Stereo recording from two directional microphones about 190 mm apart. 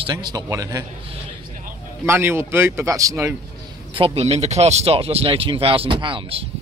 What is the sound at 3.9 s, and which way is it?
Speech, 30° right (ahead or behind).